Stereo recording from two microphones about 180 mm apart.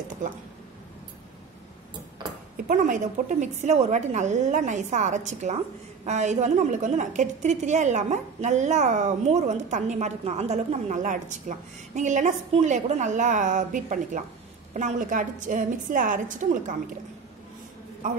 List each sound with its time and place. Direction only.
2.5 s a woman's voice: 45° right (ahead or behind)